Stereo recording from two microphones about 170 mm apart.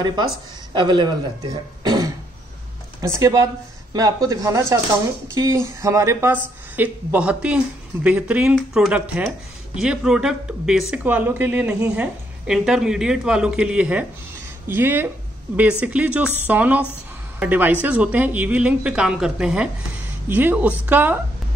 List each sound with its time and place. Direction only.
0.0 s a man's voice: 25° right (ahead or behind)